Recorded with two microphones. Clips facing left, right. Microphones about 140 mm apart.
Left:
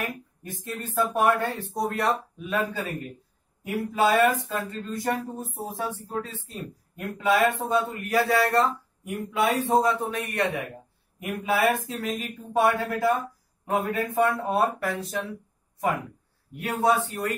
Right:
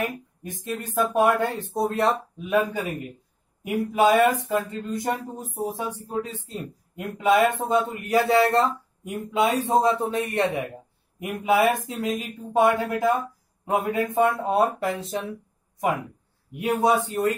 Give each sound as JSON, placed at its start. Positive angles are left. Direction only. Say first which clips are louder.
{"t": 0.0, "sound": "speech", "louder": "right 4 dB", "side_deg": -20}
{"t": 16.5, "sound": "speech", "louder": "right 2 dB", "side_deg": -15}